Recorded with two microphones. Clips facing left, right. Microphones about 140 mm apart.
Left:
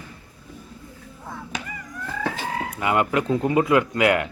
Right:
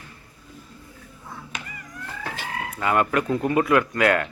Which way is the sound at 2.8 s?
20° left (ahead or behind).